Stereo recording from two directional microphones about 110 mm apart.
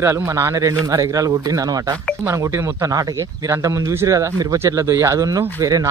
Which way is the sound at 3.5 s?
30° right (ahead or behind).